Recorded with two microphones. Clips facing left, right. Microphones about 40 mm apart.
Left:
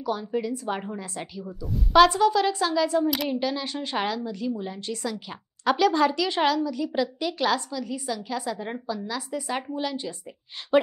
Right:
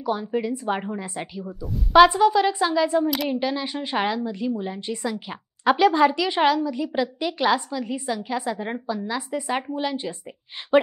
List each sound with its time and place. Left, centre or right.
0.0 s a woman's voice: centre
3.1 s speech: centre
3.3 s a woman's voice: centre